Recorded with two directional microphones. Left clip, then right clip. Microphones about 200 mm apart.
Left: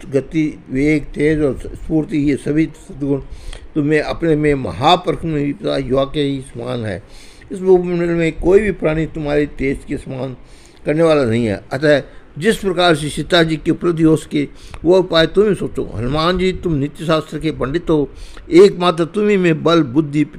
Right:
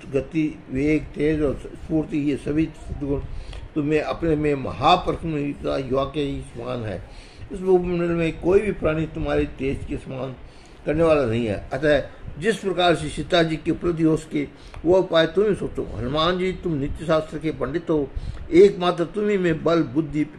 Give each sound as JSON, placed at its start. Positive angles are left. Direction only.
{"t": 0.0, "sound": "a man's voice", "side_deg": 40}